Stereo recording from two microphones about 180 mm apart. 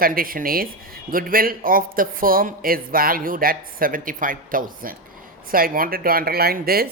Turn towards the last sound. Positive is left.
turn(degrees=-55)  # may be behind; listen again after turning